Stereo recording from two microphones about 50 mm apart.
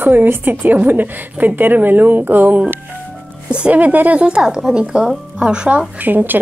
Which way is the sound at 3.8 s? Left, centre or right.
Right.